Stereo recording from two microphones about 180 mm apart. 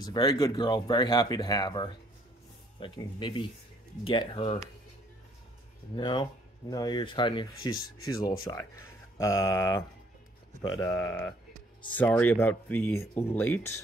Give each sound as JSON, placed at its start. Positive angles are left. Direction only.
{"t": 0.0, "sound": "speech", "side_deg": 20}
{"t": 5.9, "sound": "speech", "side_deg": 25}